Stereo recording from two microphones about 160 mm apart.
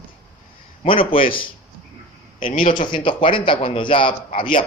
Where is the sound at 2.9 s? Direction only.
30° left (ahead or behind).